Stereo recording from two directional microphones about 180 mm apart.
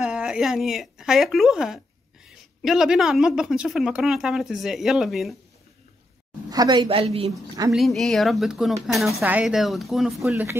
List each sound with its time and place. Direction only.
0.0 s speech: 5° right (ahead or behind)
6.5 s a woman's voice: 20° right (ahead or behind)
7.7 s speech: centre (ahead or behind)